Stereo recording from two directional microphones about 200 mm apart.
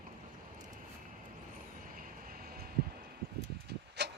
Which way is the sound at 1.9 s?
45° right (ahead or behind).